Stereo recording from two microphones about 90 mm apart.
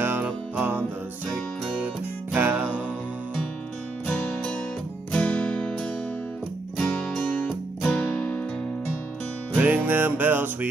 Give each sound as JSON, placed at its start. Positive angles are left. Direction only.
{"t": 0.0, "sound": "music", "side_deg": -20}
{"t": 2.3, "sound": "music", "side_deg": -20}
{"t": 4.1, "sound": "music", "side_deg": 5}
{"t": 9.6, "sound": "music", "side_deg": -20}